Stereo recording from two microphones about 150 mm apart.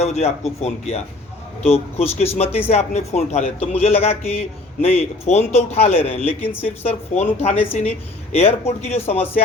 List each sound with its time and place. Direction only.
0.0 s speech: 45° left (ahead or behind)